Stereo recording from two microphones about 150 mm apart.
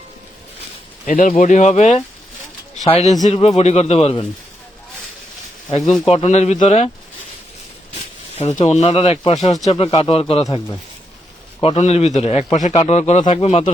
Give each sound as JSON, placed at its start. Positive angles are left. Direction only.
{"t": 1.0, "sound": "a man's voice", "side_deg": 60}
{"t": 6.1, "sound": "speech", "side_deg": 45}
{"t": 8.4, "sound": "a man's voice", "side_deg": 45}
{"t": 10.4, "sound": "speech", "side_deg": 25}
{"t": 11.6, "sound": "speech", "side_deg": 40}